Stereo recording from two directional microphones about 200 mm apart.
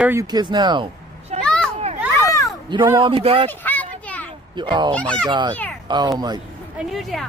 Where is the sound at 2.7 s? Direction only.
25° right (ahead or behind).